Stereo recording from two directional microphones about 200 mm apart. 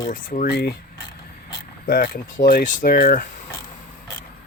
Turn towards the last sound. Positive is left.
turn(degrees=45)  # may be behind; listen again after turning